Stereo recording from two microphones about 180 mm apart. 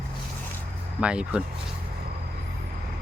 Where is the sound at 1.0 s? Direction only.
5° right (ahead or behind).